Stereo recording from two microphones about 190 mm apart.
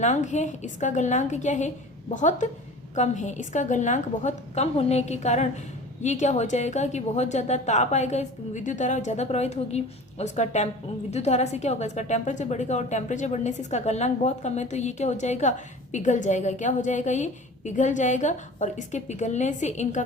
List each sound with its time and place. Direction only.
0.0 s a woman's voice: 40° left (ahead or behind)